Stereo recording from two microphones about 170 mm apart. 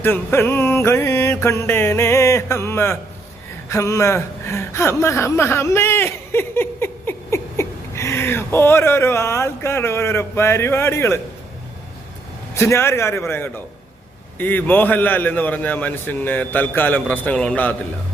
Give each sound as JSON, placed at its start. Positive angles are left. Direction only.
{"t": 0.0, "sound": "a man's voice", "side_deg": 10}
{"t": 12.5, "sound": "a man's voice", "side_deg": 15}